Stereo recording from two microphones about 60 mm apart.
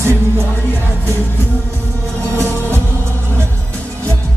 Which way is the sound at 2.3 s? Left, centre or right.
Right.